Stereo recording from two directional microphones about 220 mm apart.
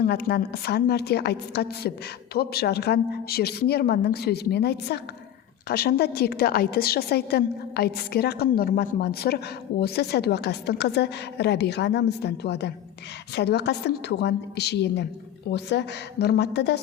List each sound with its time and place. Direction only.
0.0 s a woman's voice: 45° left (ahead or behind)